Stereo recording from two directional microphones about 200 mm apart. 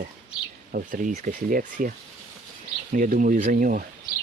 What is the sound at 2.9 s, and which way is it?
Speech, 45° right (ahead or behind).